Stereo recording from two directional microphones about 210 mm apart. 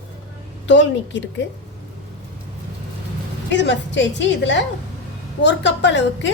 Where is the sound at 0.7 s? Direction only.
60° left (ahead or behind).